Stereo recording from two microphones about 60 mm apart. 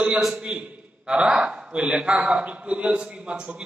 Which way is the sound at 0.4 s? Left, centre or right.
Centre.